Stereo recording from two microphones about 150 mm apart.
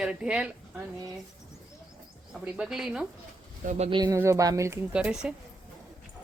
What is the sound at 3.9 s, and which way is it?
Speech, 30° right (ahead or behind).